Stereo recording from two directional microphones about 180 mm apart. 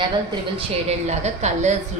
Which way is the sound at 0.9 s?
40° right (ahead or behind).